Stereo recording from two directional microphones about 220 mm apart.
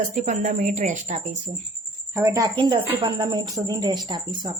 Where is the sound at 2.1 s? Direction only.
15° right (ahead or behind).